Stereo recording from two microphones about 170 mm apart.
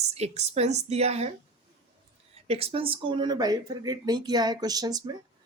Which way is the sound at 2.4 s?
35° right (ahead or behind).